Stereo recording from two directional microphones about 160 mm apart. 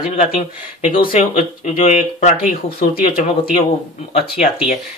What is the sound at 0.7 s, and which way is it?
Speech, 40° left (ahead or behind).